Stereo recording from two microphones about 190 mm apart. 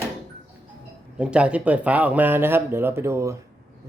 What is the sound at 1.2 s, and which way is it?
Speech, 5° right (ahead or behind).